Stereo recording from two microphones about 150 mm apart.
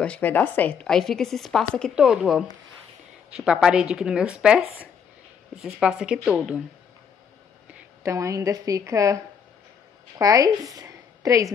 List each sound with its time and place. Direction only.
0.0 s a woman's voice: 10° left (ahead or behind); by 6.6 s 5° right (ahead or behind)
8.0 s a woman's voice: 20° right (ahead or behind)